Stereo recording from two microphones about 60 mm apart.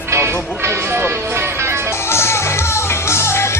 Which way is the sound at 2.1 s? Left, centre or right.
Left.